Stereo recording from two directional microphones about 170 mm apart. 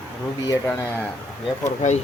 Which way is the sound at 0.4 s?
15° left (ahead or behind).